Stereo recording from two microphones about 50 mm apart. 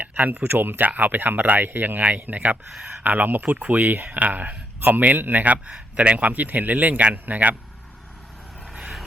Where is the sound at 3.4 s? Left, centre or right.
Right.